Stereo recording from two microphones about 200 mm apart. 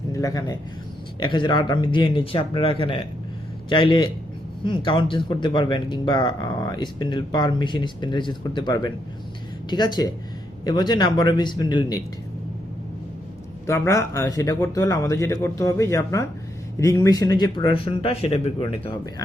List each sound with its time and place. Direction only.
0.1 s a man's voice: 15° left (ahead or behind)
13.7 s speech: 15° left (ahead or behind); by 18.7 s 30° left (ahead or behind)